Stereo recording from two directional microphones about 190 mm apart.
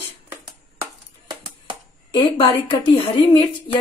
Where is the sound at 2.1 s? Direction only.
30° left (ahead or behind).